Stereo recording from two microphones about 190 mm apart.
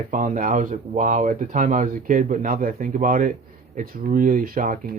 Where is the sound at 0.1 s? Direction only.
45° right (ahead or behind).